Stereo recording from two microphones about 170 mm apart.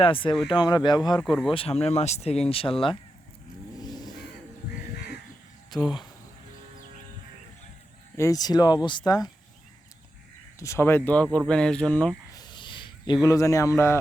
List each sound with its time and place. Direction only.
0.0 s speech: 30° left (ahead or behind)
1.2 s speech: centre (ahead or behind)
1.5 s speech: 35° left (ahead or behind)
3.8 s vehicle: 25° left (ahead or behind)
8.1 s speech: 20° left (ahead or behind)
10.6 s speech: 15° left (ahead or behind)
12.3 s a sound: 25° left (ahead or behind)
13.2 s speech: 20° left (ahead or behind)